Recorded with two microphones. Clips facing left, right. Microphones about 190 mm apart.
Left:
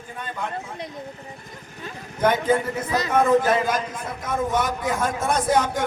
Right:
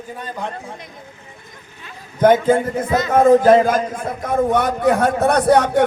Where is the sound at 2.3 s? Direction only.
50° right (ahead or behind).